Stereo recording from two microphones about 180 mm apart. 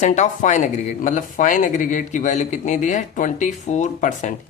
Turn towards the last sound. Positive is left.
turn(degrees=45)  # may be behind; listen again after turning